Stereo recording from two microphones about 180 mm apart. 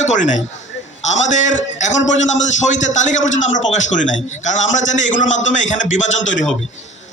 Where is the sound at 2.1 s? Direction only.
90° left.